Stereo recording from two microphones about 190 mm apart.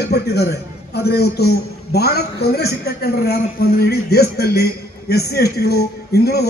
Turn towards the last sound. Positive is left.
turn(degrees=55)  # may be behind; listen again after turning